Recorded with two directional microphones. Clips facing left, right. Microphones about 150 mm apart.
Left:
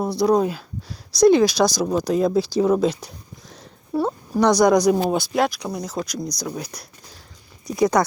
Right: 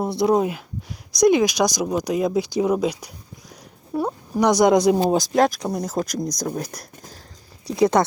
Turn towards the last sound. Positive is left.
turn(degrees=-25)  # may be behind; listen again after turning